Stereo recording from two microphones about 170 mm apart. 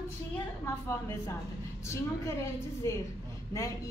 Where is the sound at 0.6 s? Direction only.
15° left (ahead or behind).